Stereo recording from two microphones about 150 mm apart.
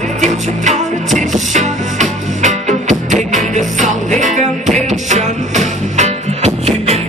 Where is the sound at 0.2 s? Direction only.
55° right (ahead or behind).